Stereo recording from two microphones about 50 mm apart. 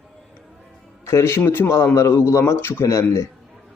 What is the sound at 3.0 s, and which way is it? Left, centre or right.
Speech, left.